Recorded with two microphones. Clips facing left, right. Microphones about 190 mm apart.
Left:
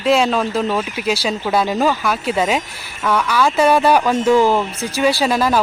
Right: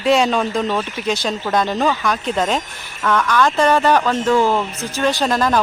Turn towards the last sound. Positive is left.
turn(degrees=5)  # may be behind; listen again after turning